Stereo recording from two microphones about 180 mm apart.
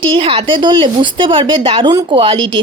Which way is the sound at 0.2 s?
30° right (ahead or behind).